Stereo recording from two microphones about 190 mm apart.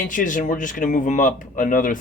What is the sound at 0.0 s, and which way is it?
Speech, 45° left (ahead or behind).